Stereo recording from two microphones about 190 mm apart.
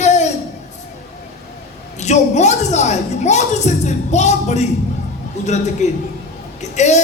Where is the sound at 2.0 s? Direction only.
35° left (ahead or behind).